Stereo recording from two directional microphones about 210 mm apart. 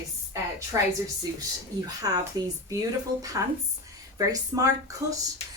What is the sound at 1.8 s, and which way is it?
A woman's voice, 20° right (ahead or behind).